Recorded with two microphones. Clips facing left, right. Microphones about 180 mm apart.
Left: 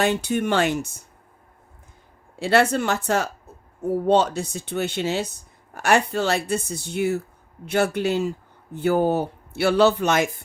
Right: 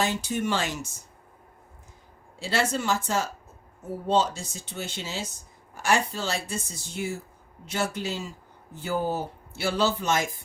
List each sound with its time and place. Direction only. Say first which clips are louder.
0.0 s speech: left 5 dB; 60° left (ahead or behind)
2.4 s speech: left 8 dB; 60° left (ahead or behind)